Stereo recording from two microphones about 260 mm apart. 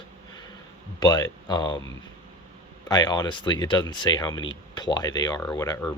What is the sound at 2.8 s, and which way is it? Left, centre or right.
Speech, centre.